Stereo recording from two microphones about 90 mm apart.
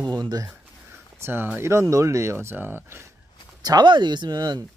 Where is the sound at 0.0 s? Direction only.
45° right (ahead or behind).